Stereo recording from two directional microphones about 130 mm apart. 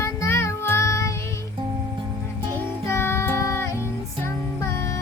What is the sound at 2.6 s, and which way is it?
Music, 20° left (ahead or behind).